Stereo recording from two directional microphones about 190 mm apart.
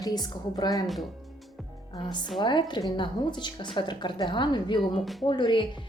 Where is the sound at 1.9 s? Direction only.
25° left (ahead or behind).